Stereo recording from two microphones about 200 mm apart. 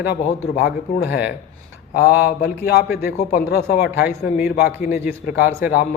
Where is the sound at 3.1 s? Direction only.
35° left (ahead or behind).